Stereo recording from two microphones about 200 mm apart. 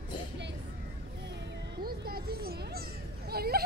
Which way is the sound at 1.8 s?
50° right (ahead or behind).